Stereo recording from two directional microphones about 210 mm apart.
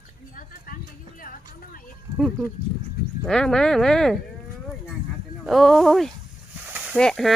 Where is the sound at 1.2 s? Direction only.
40° left (ahead or behind).